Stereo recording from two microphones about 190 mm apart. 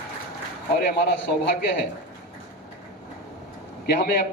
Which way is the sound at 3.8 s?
55° left (ahead or behind).